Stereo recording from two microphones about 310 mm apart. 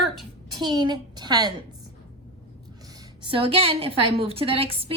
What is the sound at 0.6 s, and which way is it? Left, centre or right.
Speech, centre.